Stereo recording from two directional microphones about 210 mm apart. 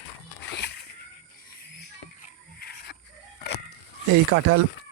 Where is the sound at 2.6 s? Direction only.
45° left (ahead or behind).